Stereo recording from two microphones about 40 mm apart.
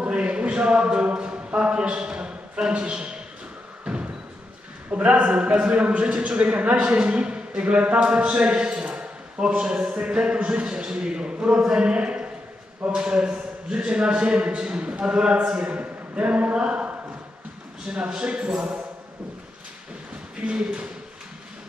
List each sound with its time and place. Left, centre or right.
0.0 s speech: right
3.8 s music: right
4.9 s a man's voice: right
20.4 s a man's voice: right